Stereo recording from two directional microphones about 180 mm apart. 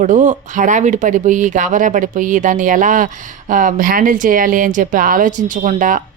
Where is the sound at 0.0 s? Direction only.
45° right (ahead or behind).